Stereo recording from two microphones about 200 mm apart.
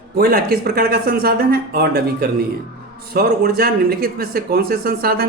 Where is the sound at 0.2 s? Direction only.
50° right (ahead or behind).